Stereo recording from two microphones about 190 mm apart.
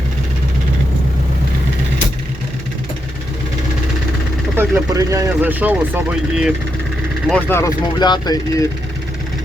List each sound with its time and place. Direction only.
4.5 s speech: 15° right (ahead or behind)
7.3 s speech: 10° left (ahead or behind)